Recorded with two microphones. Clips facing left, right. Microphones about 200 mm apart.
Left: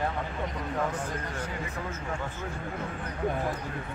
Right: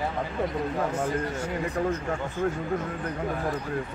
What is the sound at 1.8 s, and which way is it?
Speech, 45° right (ahead or behind).